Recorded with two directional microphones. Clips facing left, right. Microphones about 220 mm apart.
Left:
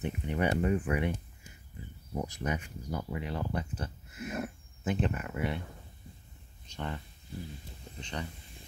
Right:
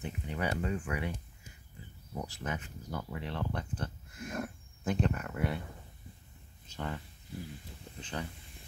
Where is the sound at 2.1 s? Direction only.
20° left (ahead or behind); by 5.6 s centre (ahead or behind).